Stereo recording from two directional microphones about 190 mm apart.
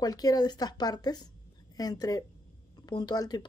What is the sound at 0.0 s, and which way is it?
A woman's voice, 20° left (ahead or behind).